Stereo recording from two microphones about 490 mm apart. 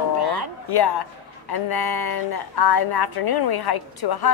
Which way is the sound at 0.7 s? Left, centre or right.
Left.